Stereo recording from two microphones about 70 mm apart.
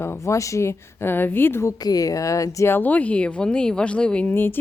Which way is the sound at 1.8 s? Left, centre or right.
Left.